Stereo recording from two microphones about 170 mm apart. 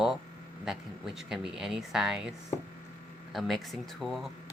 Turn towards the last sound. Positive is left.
turn(degrees=0)  # may be behind; listen again after turning